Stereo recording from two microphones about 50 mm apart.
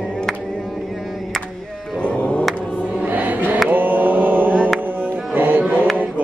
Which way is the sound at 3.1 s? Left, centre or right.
Right.